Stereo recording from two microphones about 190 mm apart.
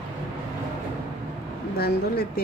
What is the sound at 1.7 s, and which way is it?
Speech, 55° left (ahead or behind).